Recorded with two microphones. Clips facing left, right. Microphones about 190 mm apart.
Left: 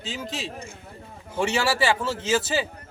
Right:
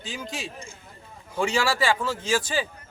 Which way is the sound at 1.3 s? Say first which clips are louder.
Left 1 dB; 25° left (ahead or behind).